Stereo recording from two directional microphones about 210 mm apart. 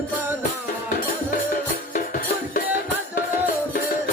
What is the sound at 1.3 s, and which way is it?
Music, 40° left (ahead or behind).